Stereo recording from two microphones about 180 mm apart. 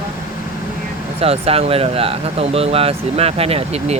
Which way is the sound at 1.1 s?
35° right (ahead or behind).